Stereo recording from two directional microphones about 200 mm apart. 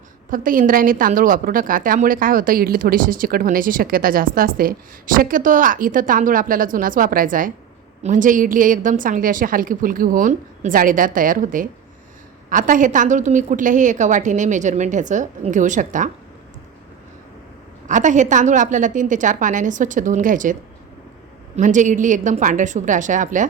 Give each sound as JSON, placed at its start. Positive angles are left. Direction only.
{"t": 0.3, "sound": "a woman's voice", "side_deg": -45}
{"t": 17.8, "sound": "a woman's voice", "side_deg": -40}